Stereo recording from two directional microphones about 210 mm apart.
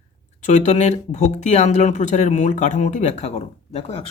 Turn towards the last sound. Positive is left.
turn(degrees=30)  # may be behind; listen again after turning